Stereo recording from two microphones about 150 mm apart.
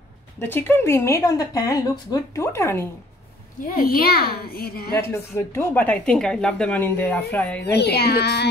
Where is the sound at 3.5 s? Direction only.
70° left (ahead or behind); by 4.9 s 90° left.